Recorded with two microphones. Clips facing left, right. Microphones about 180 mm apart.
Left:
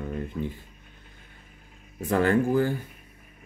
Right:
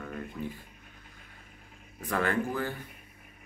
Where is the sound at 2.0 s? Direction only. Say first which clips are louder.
Left 7 dB; 30° left (ahead or behind).